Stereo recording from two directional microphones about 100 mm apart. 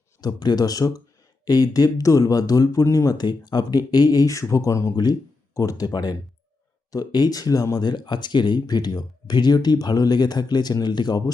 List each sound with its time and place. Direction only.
0.2 s speech: 40° left (ahead or behind)